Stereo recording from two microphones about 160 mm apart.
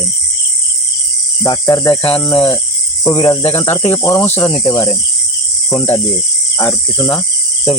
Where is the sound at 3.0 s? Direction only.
30° left (ahead or behind).